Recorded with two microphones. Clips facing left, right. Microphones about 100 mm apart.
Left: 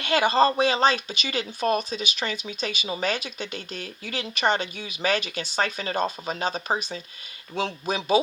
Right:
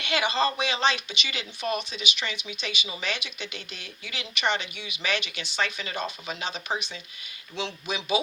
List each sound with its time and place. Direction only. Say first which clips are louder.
0.0 s speech: left 6 dB; 40° left (ahead or behind)